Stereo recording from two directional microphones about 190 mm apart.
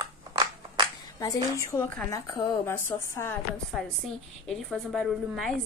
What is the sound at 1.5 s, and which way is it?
Speech, 20° left (ahead or behind).